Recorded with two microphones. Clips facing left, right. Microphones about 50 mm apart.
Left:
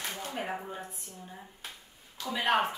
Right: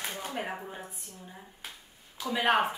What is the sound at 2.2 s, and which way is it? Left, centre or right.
Speech, centre.